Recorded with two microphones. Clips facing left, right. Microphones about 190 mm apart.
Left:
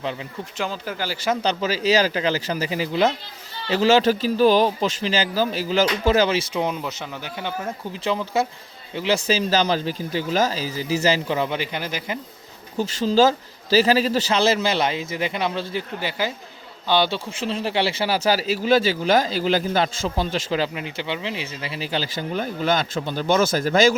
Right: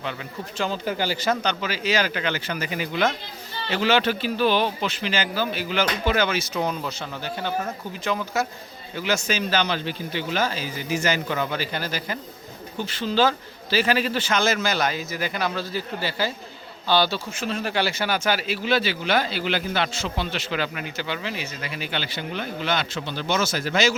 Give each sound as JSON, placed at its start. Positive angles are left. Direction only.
{"t": 0.6, "sound": "speech", "side_deg": 0}
{"t": 1.4, "sound": "speech", "side_deg": 35}
{"t": 8.0, "sound": "a man's voice", "side_deg": 30}
{"t": 12.7, "sound": "a man's voice", "side_deg": 40}